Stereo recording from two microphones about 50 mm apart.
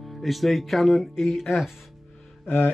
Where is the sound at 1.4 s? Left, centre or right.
Centre.